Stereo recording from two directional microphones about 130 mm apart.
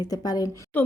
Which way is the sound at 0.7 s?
10° left (ahead or behind).